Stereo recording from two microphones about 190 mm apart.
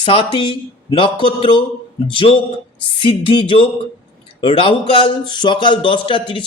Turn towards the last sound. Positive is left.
turn(degrees=25)  # may be behind; listen again after turning